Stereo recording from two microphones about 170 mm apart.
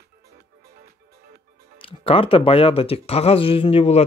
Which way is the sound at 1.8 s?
30° left (ahead or behind).